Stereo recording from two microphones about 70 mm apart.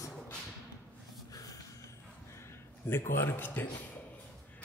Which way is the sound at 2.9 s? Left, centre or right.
Left.